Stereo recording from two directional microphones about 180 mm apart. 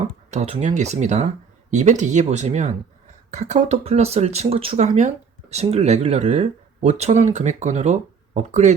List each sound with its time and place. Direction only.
0.3 s speech: 35° right (ahead or behind)